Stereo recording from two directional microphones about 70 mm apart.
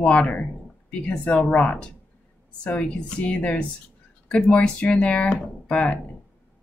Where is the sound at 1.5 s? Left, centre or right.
Centre.